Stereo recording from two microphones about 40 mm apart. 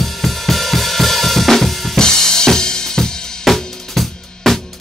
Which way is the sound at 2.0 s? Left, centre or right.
Centre.